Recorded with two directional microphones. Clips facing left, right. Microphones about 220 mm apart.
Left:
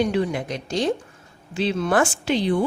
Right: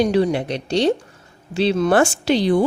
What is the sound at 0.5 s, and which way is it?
Speech, 70° right (ahead or behind).